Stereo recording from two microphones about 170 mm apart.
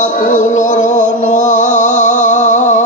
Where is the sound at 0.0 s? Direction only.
45° left (ahead or behind).